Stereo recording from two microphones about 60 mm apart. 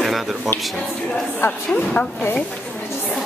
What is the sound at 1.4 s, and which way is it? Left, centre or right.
Speech, left.